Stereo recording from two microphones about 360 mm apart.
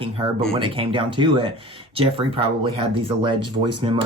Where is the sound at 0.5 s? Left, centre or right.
Centre.